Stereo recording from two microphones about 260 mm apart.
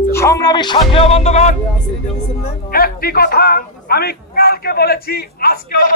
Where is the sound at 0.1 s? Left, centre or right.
Centre.